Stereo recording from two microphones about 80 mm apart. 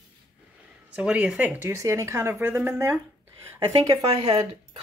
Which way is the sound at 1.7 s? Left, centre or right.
Right.